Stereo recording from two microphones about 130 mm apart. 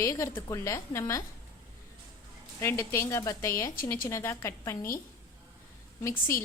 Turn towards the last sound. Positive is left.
turn(degrees=20)  # may be behind; listen again after turning